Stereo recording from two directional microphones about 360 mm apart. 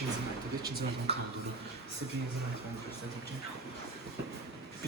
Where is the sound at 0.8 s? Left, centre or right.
Right.